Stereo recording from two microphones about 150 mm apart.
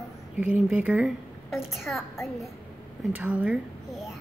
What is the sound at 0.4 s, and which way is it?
A woman's voice, 10° right (ahead or behind).